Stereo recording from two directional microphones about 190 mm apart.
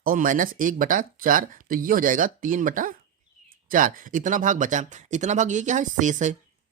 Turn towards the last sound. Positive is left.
turn(degrees=-40)  # may be behind; listen again after turning